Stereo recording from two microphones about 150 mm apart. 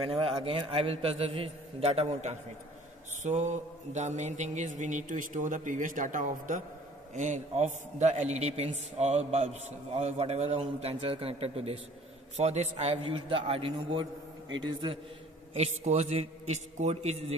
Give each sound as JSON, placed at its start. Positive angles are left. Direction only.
{"t": 0.0, "sound": "a man's voice", "side_deg": -40}
{"t": 3.3, "sound": "mantra", "side_deg": -50}
{"t": 7.2, "sound": "a man's voice", "side_deg": -50}
{"t": 15.5, "sound": "a man's voice", "side_deg": -45}